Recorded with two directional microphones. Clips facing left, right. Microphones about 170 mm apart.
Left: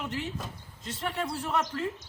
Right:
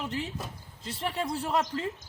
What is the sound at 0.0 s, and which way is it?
Speech, 30° right (ahead or behind).